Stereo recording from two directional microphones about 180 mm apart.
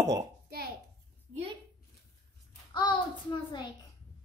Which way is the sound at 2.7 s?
25° left (ahead or behind).